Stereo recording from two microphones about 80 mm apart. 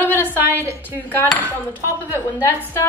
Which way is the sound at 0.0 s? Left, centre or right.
Left.